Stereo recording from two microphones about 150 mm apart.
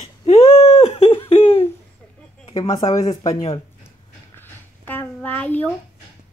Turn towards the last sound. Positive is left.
turn(degrees=10)  # may be behind; listen again after turning